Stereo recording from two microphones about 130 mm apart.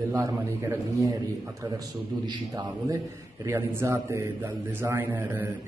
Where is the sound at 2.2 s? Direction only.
30° right (ahead or behind).